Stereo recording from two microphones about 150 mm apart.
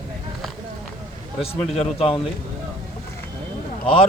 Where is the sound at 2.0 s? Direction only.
40° left (ahead or behind).